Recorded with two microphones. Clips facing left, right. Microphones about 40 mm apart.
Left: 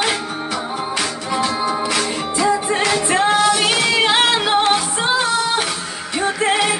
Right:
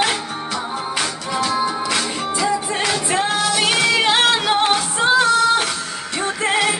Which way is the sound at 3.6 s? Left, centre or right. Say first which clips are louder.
Even; centre.